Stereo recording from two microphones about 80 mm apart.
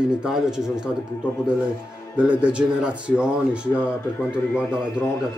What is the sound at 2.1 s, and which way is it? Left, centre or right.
Speech, centre.